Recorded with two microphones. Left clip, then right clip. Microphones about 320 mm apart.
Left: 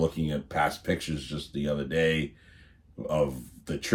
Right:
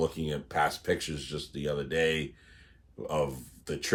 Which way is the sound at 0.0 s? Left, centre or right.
Centre.